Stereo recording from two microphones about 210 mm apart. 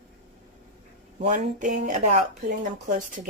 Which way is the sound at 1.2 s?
35° right (ahead or behind).